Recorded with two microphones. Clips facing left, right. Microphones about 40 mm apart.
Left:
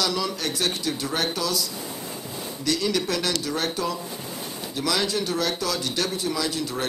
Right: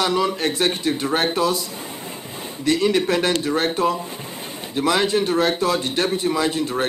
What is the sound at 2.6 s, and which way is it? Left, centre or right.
A man's voice, right.